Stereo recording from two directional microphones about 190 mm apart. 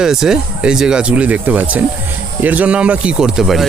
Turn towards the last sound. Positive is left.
turn(degrees=0)  # may be behind; listen again after turning